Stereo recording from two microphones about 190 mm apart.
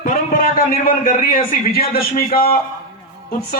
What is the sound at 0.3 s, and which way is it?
A man's voice, 50° left (ahead or behind).